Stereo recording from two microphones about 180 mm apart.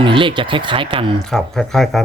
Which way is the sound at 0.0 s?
30° right (ahead or behind).